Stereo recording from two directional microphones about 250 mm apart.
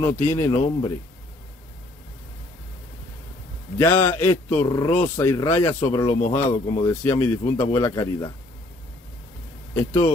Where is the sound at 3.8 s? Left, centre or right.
Centre.